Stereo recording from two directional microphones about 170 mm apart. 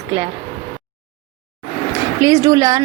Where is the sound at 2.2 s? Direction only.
20° right (ahead or behind).